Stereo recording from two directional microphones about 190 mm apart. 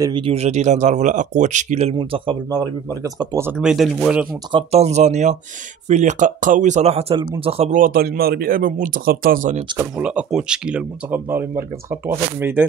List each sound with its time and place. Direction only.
0.0 s speech: 25° right (ahead or behind); by 4.3 s 5° right (ahead or behind)
4.5 s speech: 30° right (ahead or behind)
7.8 s speech: 50° right (ahead or behind)
9.8 s speech: 5° right (ahead or behind)